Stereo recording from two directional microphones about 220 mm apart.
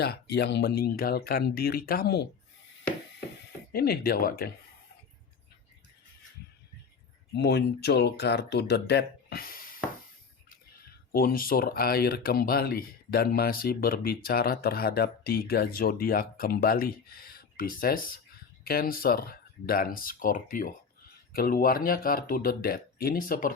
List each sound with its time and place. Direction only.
0.0 s speech: 50° left (ahead or behind)
3.7 s speech: 45° left (ahead or behind)
7.3 s speech: 50° left (ahead or behind)
11.1 s speech: 40° left (ahead or behind)